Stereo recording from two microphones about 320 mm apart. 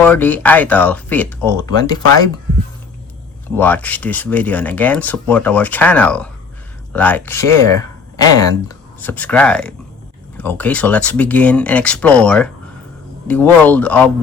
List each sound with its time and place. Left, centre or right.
0.0 s speech: centre
3.6 s speech: centre